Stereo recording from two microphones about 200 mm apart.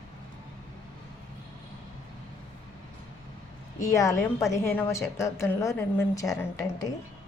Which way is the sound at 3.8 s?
15° left (ahead or behind).